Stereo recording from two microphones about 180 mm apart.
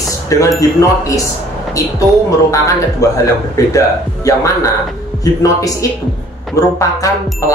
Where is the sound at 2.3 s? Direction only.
20° left (ahead or behind).